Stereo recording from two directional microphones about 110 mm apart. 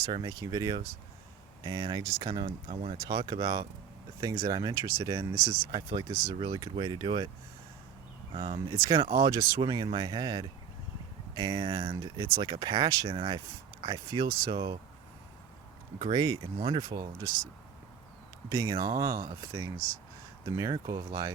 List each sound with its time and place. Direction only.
0.1 s speech: 40° right (ahead or behind)
3.1 s speech: 35° right (ahead or behind)
8.4 s speech: 35° right (ahead or behind)
16.0 s speech: 50° right (ahead or behind)
16.2 s speech: 35° right (ahead or behind)
18.4 s speech: 30° right (ahead or behind)
20.6 s speech: 35° right (ahead or behind)